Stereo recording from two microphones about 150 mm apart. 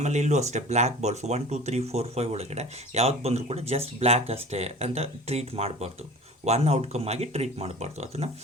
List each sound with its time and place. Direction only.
0.0 s speech: 50° right (ahead or behind)